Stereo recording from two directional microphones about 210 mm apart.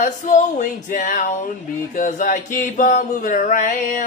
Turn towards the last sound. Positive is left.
turn(degrees=40)  # may be behind; listen again after turning